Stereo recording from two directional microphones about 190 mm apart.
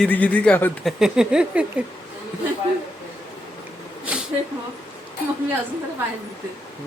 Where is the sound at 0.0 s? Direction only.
5° left (ahead or behind).